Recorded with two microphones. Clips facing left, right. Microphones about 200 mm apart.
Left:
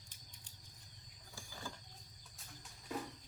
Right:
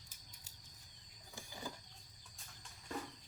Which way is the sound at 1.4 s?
20° right (ahead or behind).